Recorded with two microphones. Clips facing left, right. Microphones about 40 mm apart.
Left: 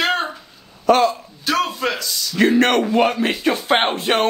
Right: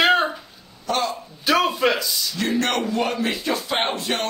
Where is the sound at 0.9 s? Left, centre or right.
Left.